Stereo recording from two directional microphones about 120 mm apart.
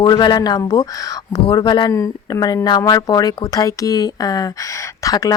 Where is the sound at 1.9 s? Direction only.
25° left (ahead or behind).